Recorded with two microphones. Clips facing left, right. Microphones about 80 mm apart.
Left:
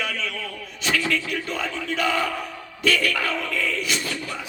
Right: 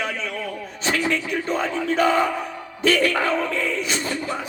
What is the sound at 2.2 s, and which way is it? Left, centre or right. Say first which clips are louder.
Speech: right 3 dB; centre.